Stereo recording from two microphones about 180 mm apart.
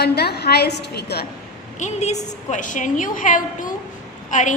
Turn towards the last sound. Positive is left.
turn(degrees=45)  # may be behind; listen again after turning